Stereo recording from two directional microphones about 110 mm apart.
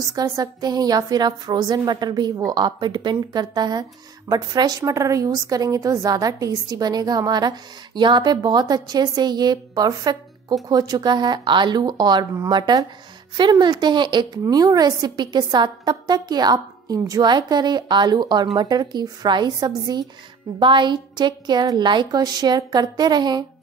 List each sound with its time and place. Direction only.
0.1 s a woman's voice: 35° right (ahead or behind)